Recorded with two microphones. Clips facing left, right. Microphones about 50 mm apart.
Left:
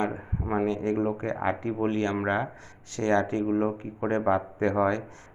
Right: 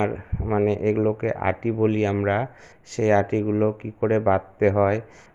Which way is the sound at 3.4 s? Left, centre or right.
Right.